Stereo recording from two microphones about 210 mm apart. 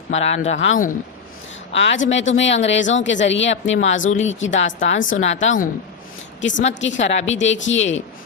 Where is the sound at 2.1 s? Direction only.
60° left (ahead or behind).